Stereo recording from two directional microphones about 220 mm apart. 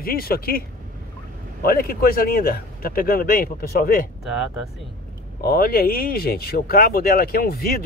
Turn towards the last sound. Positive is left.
turn(degrees=45)  # may be behind; listen again after turning